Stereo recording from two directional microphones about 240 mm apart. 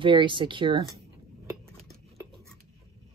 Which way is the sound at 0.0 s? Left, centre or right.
Centre.